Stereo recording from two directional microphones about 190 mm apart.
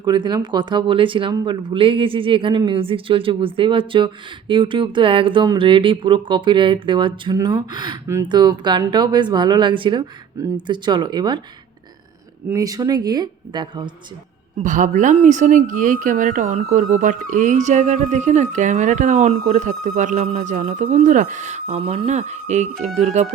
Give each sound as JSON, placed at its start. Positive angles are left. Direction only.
{"t": 0.0, "sound": "speech", "side_deg": -25}
{"t": 12.5, "sound": "speech", "side_deg": -20}
{"t": 14.6, "sound": "speech", "side_deg": -40}